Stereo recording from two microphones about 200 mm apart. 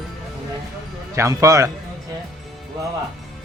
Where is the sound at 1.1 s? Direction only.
15° right (ahead or behind).